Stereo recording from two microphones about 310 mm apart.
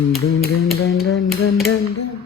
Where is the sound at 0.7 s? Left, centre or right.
Left.